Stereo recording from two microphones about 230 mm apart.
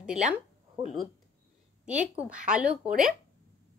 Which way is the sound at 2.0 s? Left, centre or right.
Centre.